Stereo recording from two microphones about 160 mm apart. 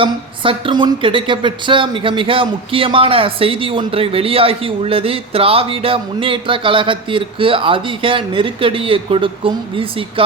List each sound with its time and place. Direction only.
0.0 s a woman's voice: 35° right (ahead or behind)